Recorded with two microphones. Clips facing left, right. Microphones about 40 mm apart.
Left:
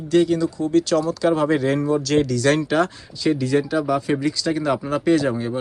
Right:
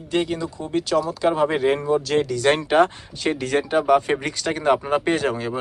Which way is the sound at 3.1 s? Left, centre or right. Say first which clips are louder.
Left 3 dB; right.